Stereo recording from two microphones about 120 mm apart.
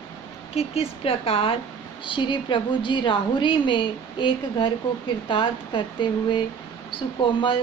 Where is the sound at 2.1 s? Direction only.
40° left (ahead or behind).